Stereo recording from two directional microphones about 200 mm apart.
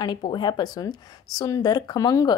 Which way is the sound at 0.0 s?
20° left (ahead or behind).